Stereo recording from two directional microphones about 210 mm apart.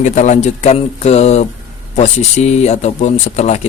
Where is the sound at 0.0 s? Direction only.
35° left (ahead or behind).